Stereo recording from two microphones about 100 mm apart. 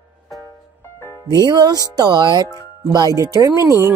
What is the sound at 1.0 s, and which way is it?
Music, 25° left (ahead or behind).